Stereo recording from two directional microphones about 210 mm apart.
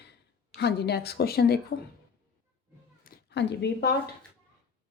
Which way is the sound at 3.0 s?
50° left (ahead or behind).